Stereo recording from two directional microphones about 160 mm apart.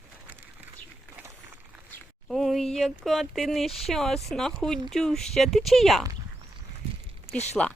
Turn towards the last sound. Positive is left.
turn(degrees=45)  # may be behind; listen again after turning